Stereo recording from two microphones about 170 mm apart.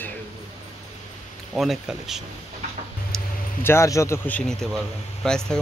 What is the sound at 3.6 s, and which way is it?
Speech, 15° left (ahead or behind).